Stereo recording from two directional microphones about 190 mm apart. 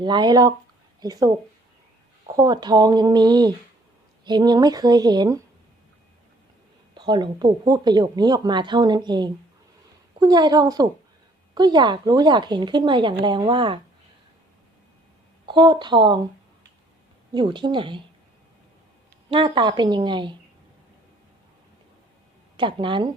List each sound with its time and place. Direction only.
0.0 s speech: 25° right (ahead or behind)
2.3 s speech: 20° right (ahead or behind)
6.9 s speech: 25° right (ahead or behind)
15.4 s speech: 25° right (ahead or behind)
17.3 s speech: 25° right (ahead or behind)
19.3 s speech: 25° right (ahead or behind)
22.5 s speech: 25° right (ahead or behind)